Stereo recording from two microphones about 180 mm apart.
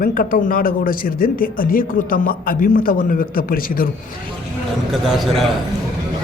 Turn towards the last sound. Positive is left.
turn(degrees=0)  # may be behind; listen again after turning